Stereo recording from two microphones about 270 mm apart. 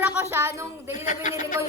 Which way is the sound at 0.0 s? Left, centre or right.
Centre.